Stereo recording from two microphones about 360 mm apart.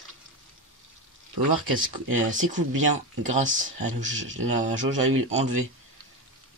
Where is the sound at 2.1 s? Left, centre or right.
Right.